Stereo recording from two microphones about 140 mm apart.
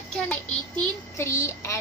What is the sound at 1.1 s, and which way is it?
Speech, 20° left (ahead or behind).